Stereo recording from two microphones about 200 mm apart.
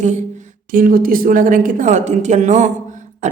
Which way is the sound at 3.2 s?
35° right (ahead or behind).